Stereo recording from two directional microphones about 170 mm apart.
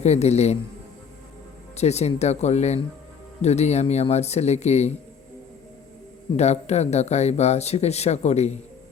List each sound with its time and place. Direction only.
0.0 s speech: 40° left (ahead or behind)
1.7 s speech: 40° left (ahead or behind)
6.3 s speech: 40° left (ahead or behind)